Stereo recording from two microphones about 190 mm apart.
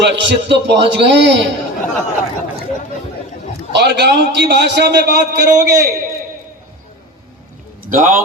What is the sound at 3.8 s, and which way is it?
A man's voice, 65° right (ahead or behind).